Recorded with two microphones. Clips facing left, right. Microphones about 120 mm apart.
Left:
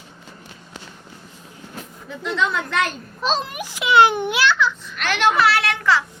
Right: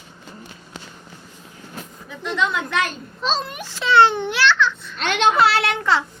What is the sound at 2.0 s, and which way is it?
Speech, centre (ahead or behind).